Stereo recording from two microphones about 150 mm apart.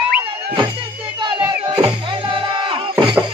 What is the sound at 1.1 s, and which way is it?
Music, 35° right (ahead or behind).